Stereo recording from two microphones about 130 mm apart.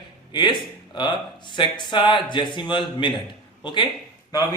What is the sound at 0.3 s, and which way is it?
A man's voice, 35° left (ahead or behind).